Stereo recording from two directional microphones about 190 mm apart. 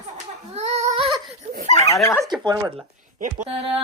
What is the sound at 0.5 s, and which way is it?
Child singing, 35° right (ahead or behind).